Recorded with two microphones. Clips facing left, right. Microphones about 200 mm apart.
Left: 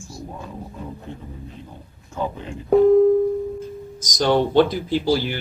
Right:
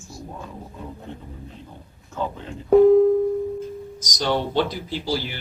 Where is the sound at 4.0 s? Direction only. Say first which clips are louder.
Left 6 dB; 50° left (ahead or behind).